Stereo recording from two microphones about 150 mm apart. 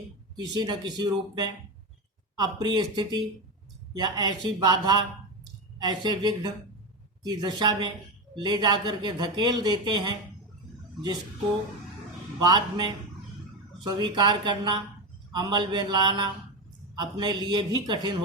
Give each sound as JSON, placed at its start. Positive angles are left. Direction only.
{"t": 0.3, "sound": "speech", "side_deg": -30}
{"t": 12.4, "sound": "speech", "side_deg": -25}